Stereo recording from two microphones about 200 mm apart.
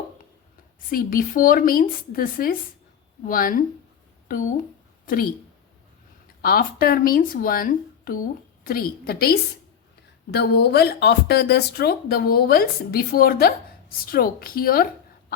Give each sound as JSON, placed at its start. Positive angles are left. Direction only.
{"t": 0.9, "sound": "speech", "side_deg": 45}
{"t": 6.4, "sound": "speech", "side_deg": 45}